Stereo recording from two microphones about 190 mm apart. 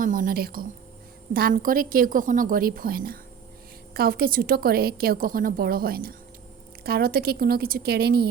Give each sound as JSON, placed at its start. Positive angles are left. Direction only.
{"t": 0.0, "sound": "a woman's voice", "side_deg": -45}